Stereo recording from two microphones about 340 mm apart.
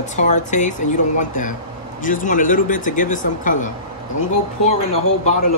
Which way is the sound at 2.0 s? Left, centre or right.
Left.